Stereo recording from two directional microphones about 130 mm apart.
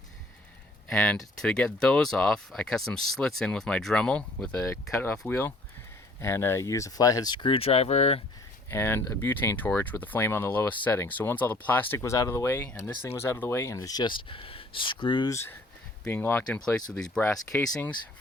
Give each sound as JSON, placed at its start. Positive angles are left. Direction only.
{"t": 0.9, "sound": "speech", "side_deg": 5}
{"t": 4.6, "sound": "speech", "side_deg": 20}
{"t": 8.7, "sound": "speech", "side_deg": 20}
{"t": 13.7, "sound": "speech", "side_deg": 30}
{"t": 15.3, "sound": "speech", "side_deg": 20}